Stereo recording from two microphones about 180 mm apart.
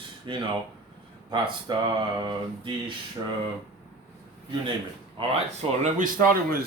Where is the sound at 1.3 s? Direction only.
25° right (ahead or behind).